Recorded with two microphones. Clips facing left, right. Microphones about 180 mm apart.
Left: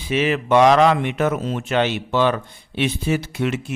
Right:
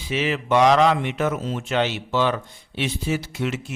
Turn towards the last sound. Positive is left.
turn(degrees=60)  # may be behind; listen again after turning